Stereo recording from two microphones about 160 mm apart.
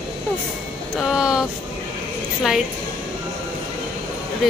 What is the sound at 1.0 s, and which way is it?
Speech, 5° right (ahead or behind).